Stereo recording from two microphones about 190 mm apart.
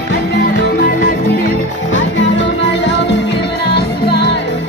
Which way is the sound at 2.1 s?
70° left (ahead or behind).